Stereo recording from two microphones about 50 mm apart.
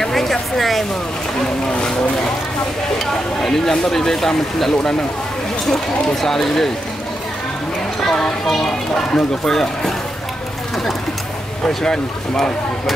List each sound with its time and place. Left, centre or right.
0.0 s a sound: centre
1.7 s speech: centre
3.1 s speech: centre
8.0 s speech: centre
11.6 s speech: centre